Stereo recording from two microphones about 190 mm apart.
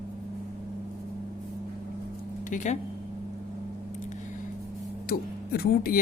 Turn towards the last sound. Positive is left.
turn(degrees=50)  # may be behind; listen again after turning